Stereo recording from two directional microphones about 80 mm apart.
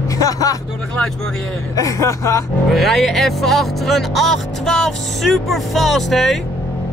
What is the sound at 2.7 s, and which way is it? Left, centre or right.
Speech, centre.